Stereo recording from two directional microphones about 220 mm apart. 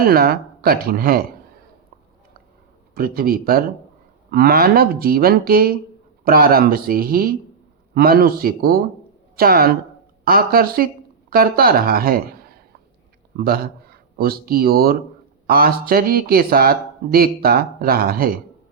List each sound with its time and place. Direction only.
0.0 s speech: 45° right (ahead or behind)
2.9 s a man's voice: 40° right (ahead or behind)